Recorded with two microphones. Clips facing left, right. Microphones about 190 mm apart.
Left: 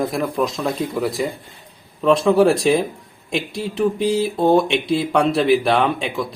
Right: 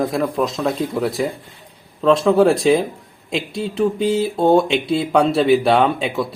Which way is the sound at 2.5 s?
25° right (ahead or behind).